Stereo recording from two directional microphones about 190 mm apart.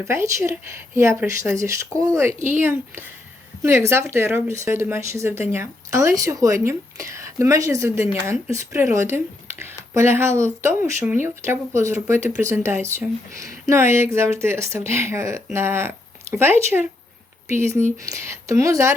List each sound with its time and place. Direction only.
0.0 s speech: 15° right (ahead or behind)